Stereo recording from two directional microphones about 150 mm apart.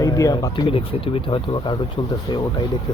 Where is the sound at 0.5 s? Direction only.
35° left (ahead or behind).